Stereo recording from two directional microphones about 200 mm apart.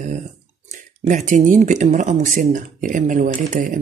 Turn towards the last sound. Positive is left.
turn(degrees=-40)  # may be behind; listen again after turning